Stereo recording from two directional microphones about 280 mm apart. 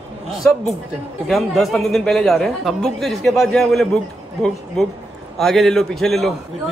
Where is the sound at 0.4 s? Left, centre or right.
Centre.